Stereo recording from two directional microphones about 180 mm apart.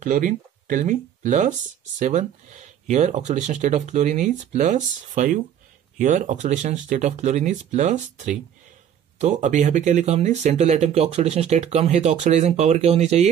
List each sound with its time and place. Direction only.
0.0 s speech: 45° right (ahead or behind)